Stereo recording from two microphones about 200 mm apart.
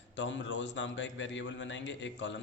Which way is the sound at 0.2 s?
65° left (ahead or behind).